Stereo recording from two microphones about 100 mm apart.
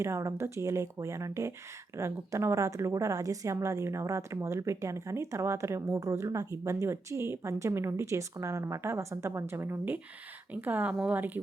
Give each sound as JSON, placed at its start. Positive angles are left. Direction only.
{"t": 0.0, "sound": "a woman's voice", "side_deg": -30}